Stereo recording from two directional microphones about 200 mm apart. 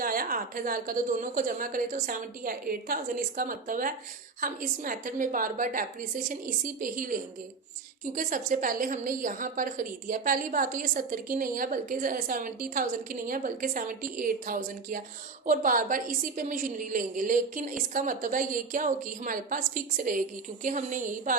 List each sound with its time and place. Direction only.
0.0 s a woman's voice: 45° right (ahead or behind)